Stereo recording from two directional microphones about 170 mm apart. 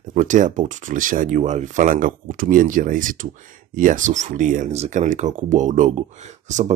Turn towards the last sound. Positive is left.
turn(degrees=-45)  # may be behind; listen again after turning